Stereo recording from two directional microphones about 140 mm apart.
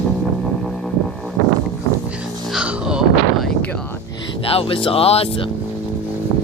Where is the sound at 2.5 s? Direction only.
5° right (ahead or behind).